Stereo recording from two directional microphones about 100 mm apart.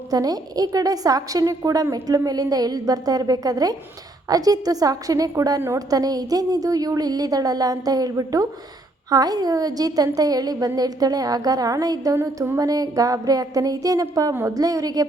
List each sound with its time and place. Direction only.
0.1 s a woman's voice: 40° right (ahead or behind)